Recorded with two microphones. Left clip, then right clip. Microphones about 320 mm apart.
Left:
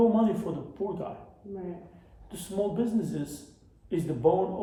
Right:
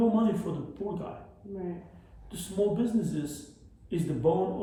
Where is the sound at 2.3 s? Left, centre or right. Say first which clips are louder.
Right 2 dB; centre.